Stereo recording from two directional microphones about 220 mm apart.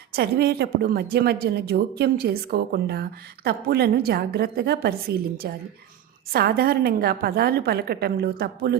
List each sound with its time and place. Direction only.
0.1 s speech: 45° right (ahead or behind)